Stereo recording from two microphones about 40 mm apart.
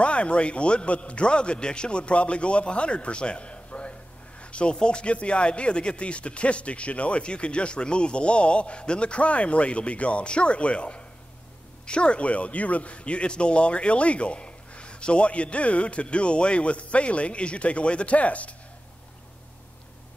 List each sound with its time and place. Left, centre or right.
0.0 s speech: left